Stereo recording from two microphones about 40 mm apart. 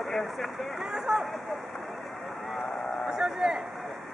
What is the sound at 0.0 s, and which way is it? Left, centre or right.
Speech, centre.